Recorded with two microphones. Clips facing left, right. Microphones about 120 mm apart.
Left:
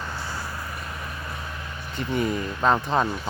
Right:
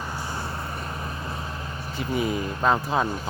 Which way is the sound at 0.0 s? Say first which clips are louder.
Right 1 dB; 15° right (ahead or behind).